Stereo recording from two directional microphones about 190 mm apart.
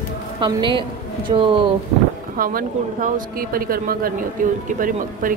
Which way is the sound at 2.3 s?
45° right (ahead or behind).